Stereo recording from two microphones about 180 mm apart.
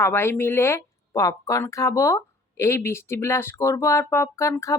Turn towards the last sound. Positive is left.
turn(degrees=15)  # may be behind; listen again after turning